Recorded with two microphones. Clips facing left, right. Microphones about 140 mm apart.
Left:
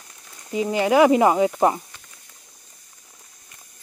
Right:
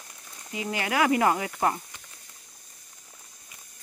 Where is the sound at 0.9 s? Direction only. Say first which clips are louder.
Left 8 dB; 20° left (ahead or behind).